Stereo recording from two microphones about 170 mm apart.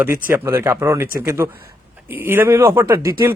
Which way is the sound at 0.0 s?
10° right (ahead or behind).